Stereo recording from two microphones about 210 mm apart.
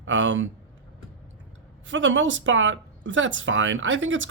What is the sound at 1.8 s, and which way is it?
Speech, 65° right (ahead or behind).